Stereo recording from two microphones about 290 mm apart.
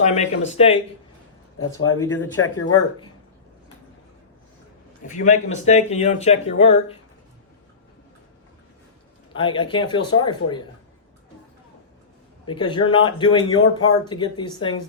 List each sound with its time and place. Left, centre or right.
0.0 s speech: left
1.9 s speech: centre
2.3 s speech: left
5.0 s speech: left
9.3 s speech: centre
12.5 s speech: centre